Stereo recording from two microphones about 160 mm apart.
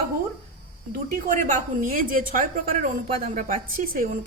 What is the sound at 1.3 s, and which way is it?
A woman's voice, 55° right (ahead or behind).